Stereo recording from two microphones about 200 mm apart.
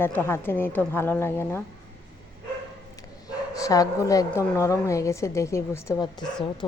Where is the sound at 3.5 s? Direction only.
15° left (ahead or behind).